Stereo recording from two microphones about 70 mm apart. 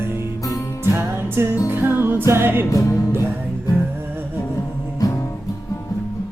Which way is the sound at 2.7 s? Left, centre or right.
Left.